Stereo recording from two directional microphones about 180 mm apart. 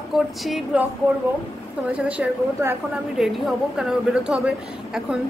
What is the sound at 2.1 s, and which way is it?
A woman's voice, 5° right (ahead or behind).